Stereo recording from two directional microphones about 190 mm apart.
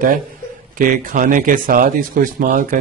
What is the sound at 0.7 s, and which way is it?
Speech, 45° right (ahead or behind).